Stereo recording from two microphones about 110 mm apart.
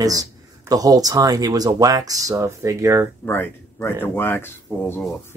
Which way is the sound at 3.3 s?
20° left (ahead or behind).